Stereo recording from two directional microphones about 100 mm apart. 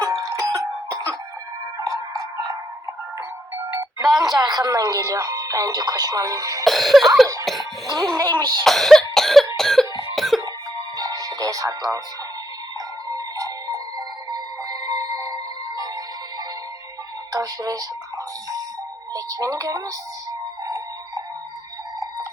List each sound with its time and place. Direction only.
0.0 s cough: 35° right (ahead or behind)
1.8 s music: 35° right (ahead or behind)
3.8 s music: 35° right (ahead or behind)
4.5 s speech: 35° right (ahead or behind)
6.7 s cough: centre (ahead or behind)
7.9 s speech: 35° right (ahead or behind)
8.3 s speech: 40° right (ahead or behind)
8.6 s cough: centre (ahead or behind)
10.2 s music: centre (ahead or behind)
10.8 s music: 35° right (ahead or behind)
13.1 s music: 35° right (ahead or behind)
17.3 s speech: 35° right (ahead or behind)
19.1 s speech: 35° right (ahead or behind)
20.7 s music: 30° right (ahead or behind)